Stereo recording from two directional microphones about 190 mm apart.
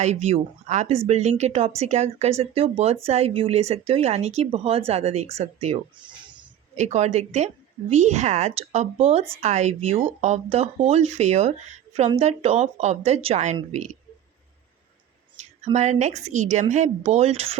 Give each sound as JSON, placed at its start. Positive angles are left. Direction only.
{"t": 0.0, "sound": "speech", "side_deg": -35}
{"t": 15.4, "sound": "speech", "side_deg": -35}